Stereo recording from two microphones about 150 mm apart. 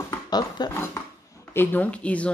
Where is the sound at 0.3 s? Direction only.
25° left (ahead or behind).